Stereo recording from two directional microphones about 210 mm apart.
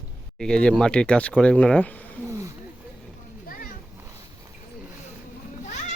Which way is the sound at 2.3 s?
15° right (ahead or behind).